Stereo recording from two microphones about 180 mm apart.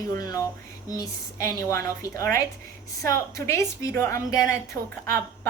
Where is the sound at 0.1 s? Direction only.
20° left (ahead or behind).